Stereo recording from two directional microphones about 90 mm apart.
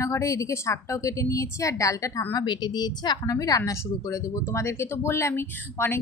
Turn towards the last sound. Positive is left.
turn(degrees=25)  # may be behind; listen again after turning